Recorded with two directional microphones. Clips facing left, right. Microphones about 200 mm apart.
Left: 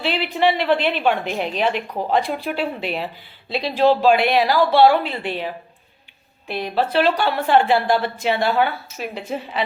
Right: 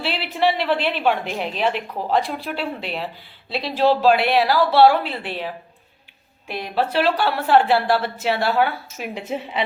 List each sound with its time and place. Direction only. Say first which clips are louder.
0.0 s a man's voice: left 2 dB; 5° right (ahead or behind)
6.5 s a woman's voice: left 2 dB; 5° right (ahead or behind)
9.1 s a woman's voice: even; 20° right (ahead or behind)